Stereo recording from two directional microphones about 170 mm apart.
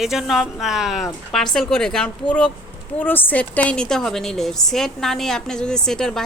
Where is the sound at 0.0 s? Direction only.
Centre (ahead or behind).